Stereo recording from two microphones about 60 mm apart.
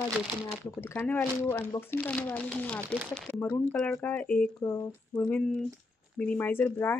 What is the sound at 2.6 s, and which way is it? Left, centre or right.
Speech, left.